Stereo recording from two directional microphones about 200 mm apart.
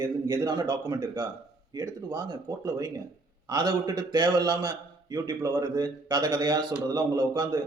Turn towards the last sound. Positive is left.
turn(degrees=-20)  # may be behind; listen again after turning